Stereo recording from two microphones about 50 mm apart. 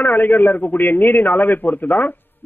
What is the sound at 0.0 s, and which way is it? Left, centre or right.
A man's voice, left.